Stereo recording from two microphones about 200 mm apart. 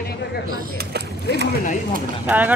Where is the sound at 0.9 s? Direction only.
55° right (ahead or behind).